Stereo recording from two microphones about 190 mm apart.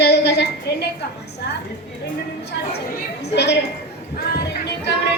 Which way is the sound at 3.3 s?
60° left (ahead or behind).